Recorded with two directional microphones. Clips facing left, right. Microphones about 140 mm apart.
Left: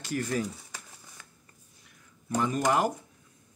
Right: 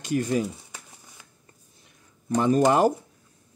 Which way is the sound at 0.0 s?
20° right (ahead or behind).